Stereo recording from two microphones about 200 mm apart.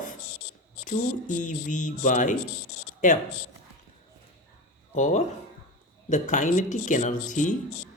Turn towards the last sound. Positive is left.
turn(degrees=40)  # may be behind; listen again after turning